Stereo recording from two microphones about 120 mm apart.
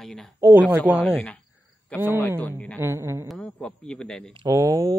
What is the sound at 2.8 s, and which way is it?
Speech, 20° right (ahead or behind).